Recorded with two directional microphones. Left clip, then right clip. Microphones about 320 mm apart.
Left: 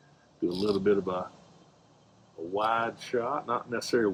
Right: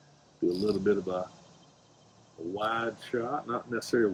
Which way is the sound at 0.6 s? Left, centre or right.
Centre.